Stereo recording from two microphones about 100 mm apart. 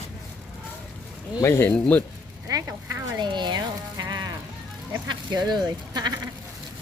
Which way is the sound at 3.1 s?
50° right (ahead or behind).